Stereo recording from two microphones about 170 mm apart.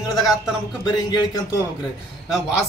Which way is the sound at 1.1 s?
20° left (ahead or behind).